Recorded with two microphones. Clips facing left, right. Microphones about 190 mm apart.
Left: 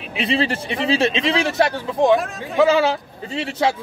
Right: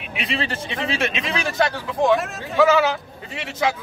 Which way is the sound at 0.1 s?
30° left (ahead or behind).